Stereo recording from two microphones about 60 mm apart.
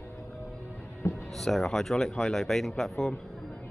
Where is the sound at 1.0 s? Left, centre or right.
Left.